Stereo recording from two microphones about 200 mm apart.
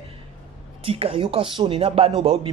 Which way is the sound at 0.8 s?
30° right (ahead or behind).